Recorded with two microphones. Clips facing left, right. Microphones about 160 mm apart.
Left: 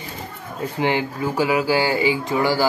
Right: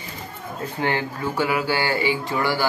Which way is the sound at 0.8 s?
15° left (ahead or behind).